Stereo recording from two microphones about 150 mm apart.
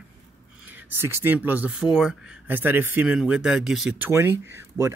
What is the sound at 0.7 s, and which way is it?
Speech, 10° right (ahead or behind).